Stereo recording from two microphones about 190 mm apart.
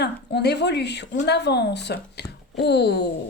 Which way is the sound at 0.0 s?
60° left (ahead or behind).